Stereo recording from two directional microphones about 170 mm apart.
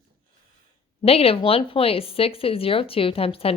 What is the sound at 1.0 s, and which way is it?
Speech, 35° left (ahead or behind).